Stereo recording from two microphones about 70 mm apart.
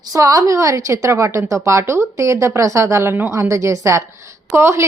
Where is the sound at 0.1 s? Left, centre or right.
Right.